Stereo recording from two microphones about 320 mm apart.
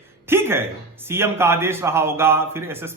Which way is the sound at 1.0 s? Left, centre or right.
Centre.